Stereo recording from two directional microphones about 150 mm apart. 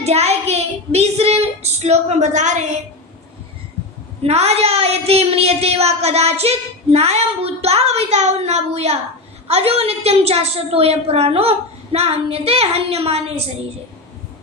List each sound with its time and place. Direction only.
0.0 s child singing: 45° right (ahead or behind)
4.2 s a woman's voice: 45° right (ahead or behind)